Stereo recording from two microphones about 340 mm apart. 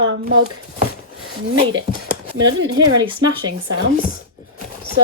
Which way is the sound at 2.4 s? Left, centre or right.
Right.